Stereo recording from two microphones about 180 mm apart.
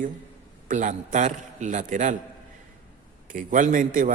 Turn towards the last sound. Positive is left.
turn(degrees=-45)  # may be behind; listen again after turning